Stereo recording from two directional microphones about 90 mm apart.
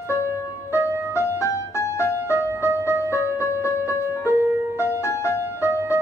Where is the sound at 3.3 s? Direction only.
35° left (ahead or behind).